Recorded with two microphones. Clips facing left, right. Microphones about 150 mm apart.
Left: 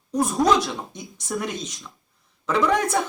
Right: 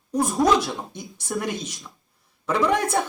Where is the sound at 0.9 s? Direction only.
55° right (ahead or behind).